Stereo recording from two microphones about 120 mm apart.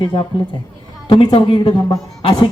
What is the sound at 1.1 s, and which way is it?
Speech, 45° left (ahead or behind).